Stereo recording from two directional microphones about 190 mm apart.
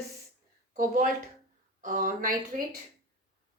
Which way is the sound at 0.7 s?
45° right (ahead or behind).